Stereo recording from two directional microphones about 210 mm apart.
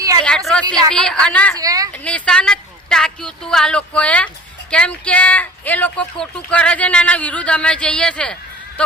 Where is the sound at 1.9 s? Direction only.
5° left (ahead or behind).